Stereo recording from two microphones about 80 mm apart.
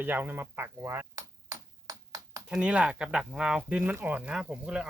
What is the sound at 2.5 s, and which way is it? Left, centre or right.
Speech, centre.